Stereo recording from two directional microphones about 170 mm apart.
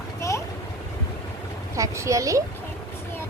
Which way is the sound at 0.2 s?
15° left (ahead or behind).